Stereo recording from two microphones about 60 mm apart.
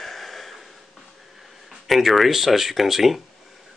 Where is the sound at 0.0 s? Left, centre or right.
Centre.